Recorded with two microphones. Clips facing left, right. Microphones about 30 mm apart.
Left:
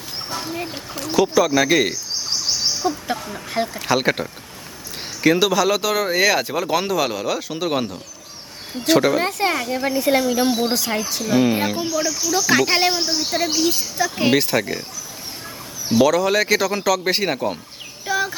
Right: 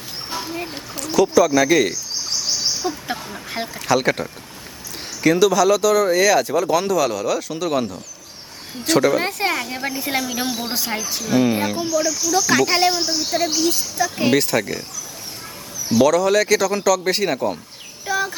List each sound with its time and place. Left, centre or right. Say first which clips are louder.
0.3 s speech: even; centre
0.9 s speech: right 2 dB; centre
2.8 s speech: left 2 dB; centre
3.8 s speech: right 3 dB; centre
8.9 s speech: even; centre
9.2 s speech: left 1 dB; centre
11.3 s speech: even; centre
16.0 s speech: right 1 dB; centre
18.0 s a sound: even; centre